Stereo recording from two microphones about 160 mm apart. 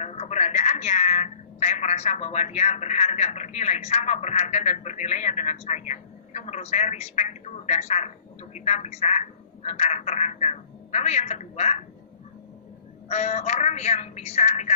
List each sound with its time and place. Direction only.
0.0 s a woman's voice: 45° left (ahead or behind)
13.1 s a woman's voice: 45° left (ahead or behind)